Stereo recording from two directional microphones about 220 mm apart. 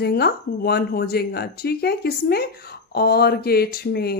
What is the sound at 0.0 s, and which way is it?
Speech, 45° left (ahead or behind).